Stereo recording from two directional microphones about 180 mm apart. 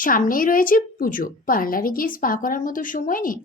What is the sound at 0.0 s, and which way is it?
A woman's voice, 50° left (ahead or behind).